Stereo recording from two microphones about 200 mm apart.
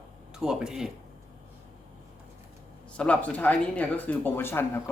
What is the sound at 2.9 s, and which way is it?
Speech, 5° left (ahead or behind).